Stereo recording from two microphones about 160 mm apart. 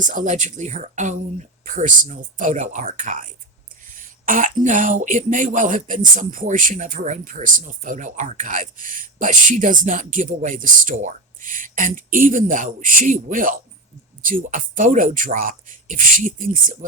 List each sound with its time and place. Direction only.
0.0 s speech: 55° right (ahead or behind)